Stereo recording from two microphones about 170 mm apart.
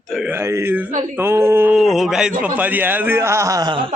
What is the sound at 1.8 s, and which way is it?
A man's voice, centre (ahead or behind).